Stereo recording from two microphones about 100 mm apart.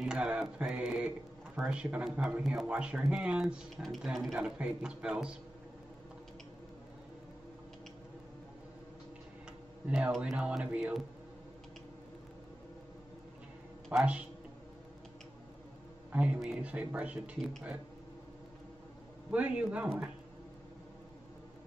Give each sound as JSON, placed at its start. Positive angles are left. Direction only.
{"t": 0.0, "sound": "speech", "side_deg": -10}
{"t": 3.7, "sound": "speech", "side_deg": 0}
{"t": 9.8, "sound": "speech", "side_deg": -15}
{"t": 13.9, "sound": "speech", "side_deg": -15}
{"t": 16.1, "sound": "speech", "side_deg": -10}
{"t": 19.3, "sound": "speech", "side_deg": -10}